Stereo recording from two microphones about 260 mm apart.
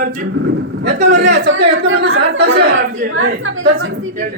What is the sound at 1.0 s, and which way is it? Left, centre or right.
A woman's voice, right.